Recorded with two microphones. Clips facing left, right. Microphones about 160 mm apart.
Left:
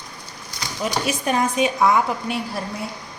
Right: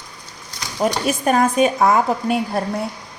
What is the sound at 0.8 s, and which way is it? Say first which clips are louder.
A woman's voice: right 5 dB; 45° right (ahead or behind).